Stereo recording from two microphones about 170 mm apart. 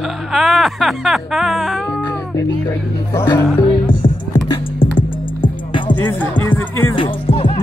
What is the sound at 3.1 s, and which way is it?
Speech, 15° left (ahead or behind).